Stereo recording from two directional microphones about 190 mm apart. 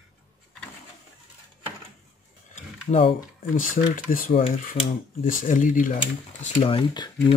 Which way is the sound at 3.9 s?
45° left (ahead or behind).